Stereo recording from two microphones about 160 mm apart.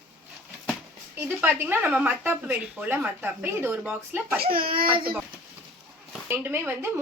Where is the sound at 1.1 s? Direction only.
15° right (ahead or behind).